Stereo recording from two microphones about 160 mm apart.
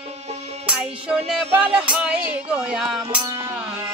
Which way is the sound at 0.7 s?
5° right (ahead or behind).